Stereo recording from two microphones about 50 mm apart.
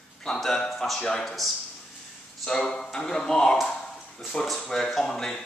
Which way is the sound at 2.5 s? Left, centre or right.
Centre.